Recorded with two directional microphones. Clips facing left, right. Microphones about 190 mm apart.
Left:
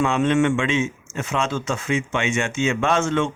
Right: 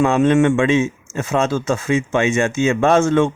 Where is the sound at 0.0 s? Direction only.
40° right (ahead or behind).